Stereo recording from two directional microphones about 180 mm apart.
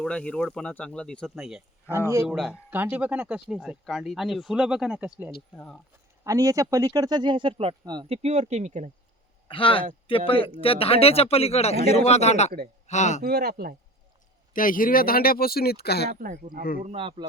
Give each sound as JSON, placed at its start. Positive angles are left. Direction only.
{"t": 0.0, "sound": "speech", "side_deg": 5}
{"t": 1.9, "sound": "speech", "side_deg": 15}
{"t": 2.2, "sound": "speech", "side_deg": 0}
{"t": 6.2, "sound": "speech", "side_deg": -20}
{"t": 9.5, "sound": "speech", "side_deg": 30}
{"t": 13.2, "sound": "speech", "side_deg": -60}
{"t": 14.5, "sound": "speech", "side_deg": 50}
{"t": 16.2, "sound": "speech", "side_deg": -50}
{"t": 16.8, "sound": "speech", "side_deg": -30}